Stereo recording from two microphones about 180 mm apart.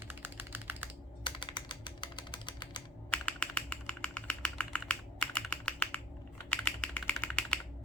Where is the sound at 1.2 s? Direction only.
25° left (ahead or behind).